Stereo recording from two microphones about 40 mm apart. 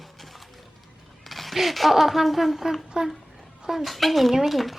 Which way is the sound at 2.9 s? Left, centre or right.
Centre.